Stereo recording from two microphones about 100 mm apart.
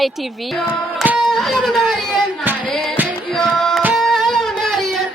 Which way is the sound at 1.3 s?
Centre (ahead or behind).